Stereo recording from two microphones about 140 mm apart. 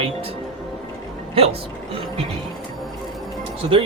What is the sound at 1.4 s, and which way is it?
Speech, 40° right (ahead or behind).